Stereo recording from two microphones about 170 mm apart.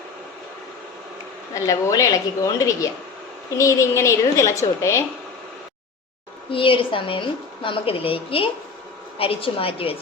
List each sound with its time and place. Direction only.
1.5 s a woman's voice: 20° left (ahead or behind)
6.5 s a woman's voice: 30° left (ahead or behind)